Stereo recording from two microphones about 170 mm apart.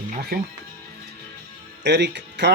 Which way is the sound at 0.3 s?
65° right (ahead or behind).